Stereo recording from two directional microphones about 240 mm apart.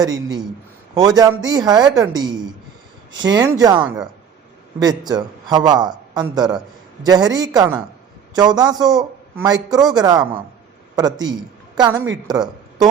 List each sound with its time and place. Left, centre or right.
0.0 s speech: centre
3.8 s speech: centre
4.8 s speech: centre